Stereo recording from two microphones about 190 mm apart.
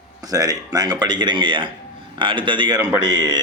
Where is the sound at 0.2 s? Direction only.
20° right (ahead or behind).